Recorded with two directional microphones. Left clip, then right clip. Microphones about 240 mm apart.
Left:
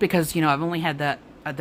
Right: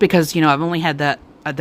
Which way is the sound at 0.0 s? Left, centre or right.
Right.